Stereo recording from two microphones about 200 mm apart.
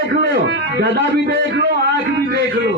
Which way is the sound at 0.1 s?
60° right (ahead or behind).